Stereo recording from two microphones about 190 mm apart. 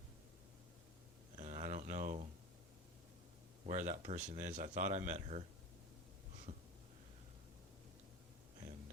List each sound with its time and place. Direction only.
1.4 s a sound: 40° right (ahead or behind)
3.7 s speech: 40° right (ahead or behind)
6.5 s snort: 40° right (ahead or behind)